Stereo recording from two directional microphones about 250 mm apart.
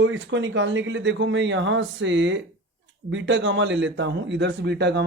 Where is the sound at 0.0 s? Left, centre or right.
Right.